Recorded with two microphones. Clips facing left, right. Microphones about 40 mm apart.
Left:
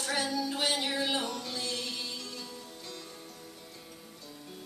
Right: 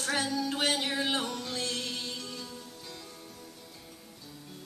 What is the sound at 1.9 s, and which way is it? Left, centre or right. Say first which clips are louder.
Music: right 1 dB; right.